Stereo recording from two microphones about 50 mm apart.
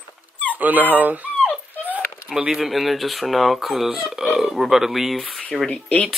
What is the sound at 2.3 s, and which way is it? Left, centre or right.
Speech, centre.